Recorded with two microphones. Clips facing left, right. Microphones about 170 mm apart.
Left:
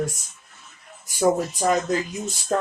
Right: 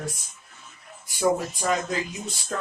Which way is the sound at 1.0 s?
40° left (ahead or behind).